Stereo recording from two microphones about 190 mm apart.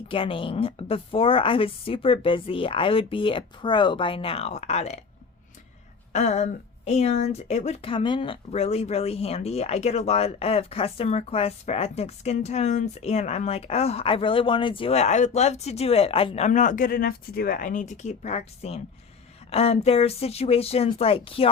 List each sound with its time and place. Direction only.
0.1 s a woman's voice: 30° left (ahead or behind)
6.1 s speech: 35° left (ahead or behind)